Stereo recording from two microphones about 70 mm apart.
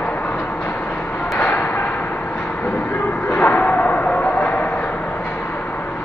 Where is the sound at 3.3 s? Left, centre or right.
Centre.